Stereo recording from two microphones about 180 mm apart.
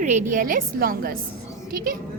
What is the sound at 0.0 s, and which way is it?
A woman's voice, 45° right (ahead or behind).